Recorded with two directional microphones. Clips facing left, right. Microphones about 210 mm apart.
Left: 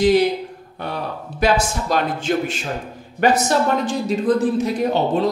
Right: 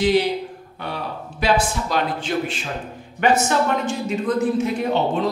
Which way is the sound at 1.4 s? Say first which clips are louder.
Left 2 dB; 45° left (ahead or behind).